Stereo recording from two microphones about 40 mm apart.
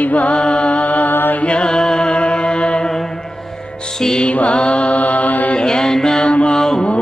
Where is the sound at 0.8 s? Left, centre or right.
Left.